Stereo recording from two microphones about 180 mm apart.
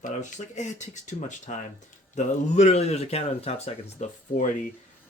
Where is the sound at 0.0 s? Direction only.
45° left (ahead or behind).